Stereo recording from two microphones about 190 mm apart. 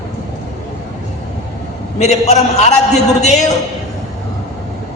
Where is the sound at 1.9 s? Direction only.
35° left (ahead or behind).